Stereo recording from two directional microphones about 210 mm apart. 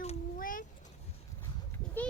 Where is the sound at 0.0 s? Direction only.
35° left (ahead or behind).